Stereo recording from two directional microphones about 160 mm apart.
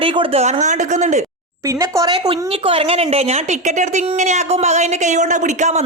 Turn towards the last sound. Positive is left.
turn(degrees=-50)  # may be behind; listen again after turning